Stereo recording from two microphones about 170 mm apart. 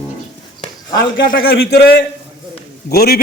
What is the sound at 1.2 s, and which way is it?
A man's voice, 60° left (ahead or behind).